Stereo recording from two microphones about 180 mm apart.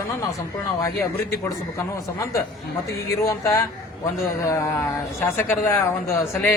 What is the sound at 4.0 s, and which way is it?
Speech, 15° left (ahead or behind).